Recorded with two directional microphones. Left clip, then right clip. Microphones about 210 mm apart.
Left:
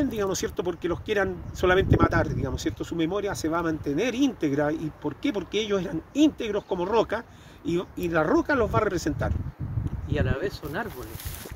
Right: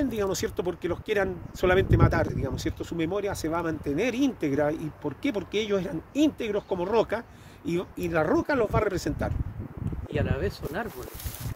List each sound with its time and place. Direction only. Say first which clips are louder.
0.0 s speech: left 1 dB; 10° right (ahead or behind)
10.1 s speech: left 1 dB; 5° left (ahead or behind)